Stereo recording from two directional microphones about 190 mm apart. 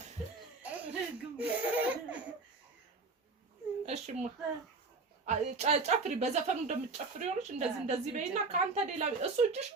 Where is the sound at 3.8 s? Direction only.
35° right (ahead or behind).